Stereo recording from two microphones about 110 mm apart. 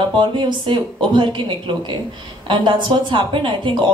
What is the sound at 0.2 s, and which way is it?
A woman's voice, 45° right (ahead or behind).